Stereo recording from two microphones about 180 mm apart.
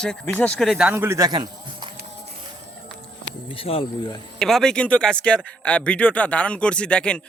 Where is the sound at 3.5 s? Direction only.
30° left (ahead or behind).